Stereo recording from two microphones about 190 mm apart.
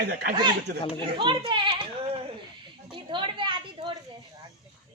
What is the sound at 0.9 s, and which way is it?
Speech, 25° right (ahead or behind).